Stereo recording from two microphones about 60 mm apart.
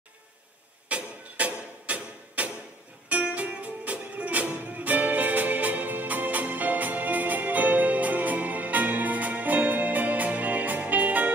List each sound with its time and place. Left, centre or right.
0.8 s music: right